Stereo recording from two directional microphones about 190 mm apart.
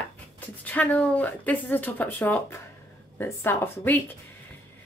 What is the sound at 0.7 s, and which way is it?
Speech, 10° left (ahead or behind).